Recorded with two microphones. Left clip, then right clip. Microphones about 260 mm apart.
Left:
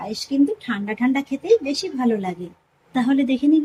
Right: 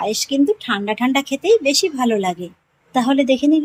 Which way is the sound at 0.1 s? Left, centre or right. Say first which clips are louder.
Right 4 dB; right.